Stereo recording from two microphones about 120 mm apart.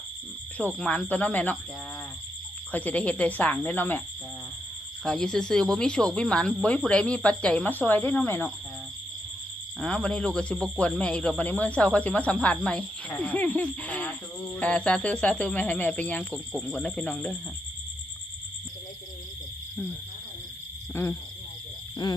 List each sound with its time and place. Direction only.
0.6 s a man's voice: 10° left (ahead or behind)
2.7 s a man's voice: 10° left (ahead or behind)
5.0 s a man's voice: 5° left (ahead or behind)
9.8 s a man's voice: 5° left (ahead or behind)
20.9 s speech: 20° left (ahead or behind)